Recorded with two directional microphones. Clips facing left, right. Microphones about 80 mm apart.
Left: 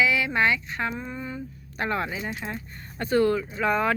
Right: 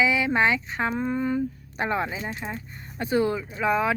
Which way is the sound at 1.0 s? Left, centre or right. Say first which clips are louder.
Right 9 dB; right.